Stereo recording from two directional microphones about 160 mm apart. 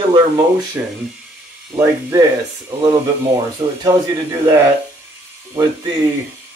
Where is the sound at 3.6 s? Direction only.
20° right (ahead or behind).